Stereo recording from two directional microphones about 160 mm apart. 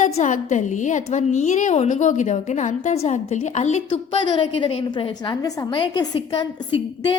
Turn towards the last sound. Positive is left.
turn(degrees=30)  # may be behind; listen again after turning